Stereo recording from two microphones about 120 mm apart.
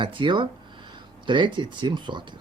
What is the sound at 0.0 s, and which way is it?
Speech, 45° right (ahead or behind).